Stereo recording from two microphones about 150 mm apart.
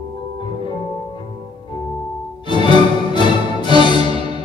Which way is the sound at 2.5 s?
30° left (ahead or behind).